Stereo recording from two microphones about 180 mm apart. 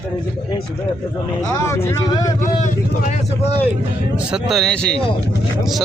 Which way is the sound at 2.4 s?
45° left (ahead or behind).